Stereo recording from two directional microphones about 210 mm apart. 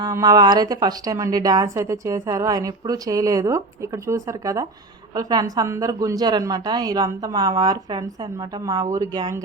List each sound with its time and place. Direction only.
0.0 s speech: 20° right (ahead or behind)